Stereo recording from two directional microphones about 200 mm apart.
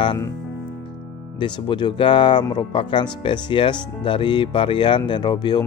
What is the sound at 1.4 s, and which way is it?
Speech, 25° left (ahead or behind).